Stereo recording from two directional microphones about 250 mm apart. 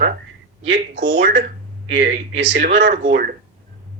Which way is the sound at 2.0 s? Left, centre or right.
Right.